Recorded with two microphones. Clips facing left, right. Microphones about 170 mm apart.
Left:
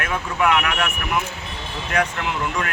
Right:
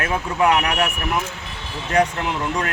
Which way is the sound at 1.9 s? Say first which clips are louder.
Right 4 dB; 30° right (ahead or behind).